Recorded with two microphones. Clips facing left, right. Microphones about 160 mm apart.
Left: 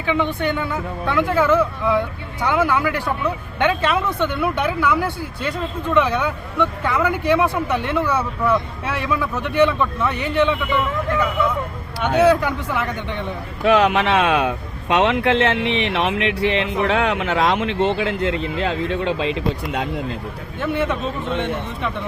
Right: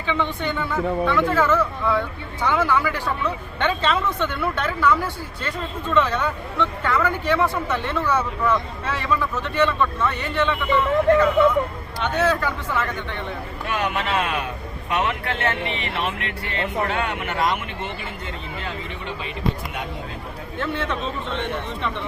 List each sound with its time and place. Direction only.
0.0 s speech: 15° left (ahead or behind)
11.9 s speech: 15° left (ahead or behind)
13.7 s a man's voice: 90° left
20.6 s speech: 10° left (ahead or behind)